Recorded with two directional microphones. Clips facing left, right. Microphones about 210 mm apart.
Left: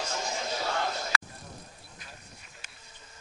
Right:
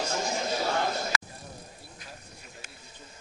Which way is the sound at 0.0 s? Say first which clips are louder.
Right 4 dB; 35° right (ahead or behind).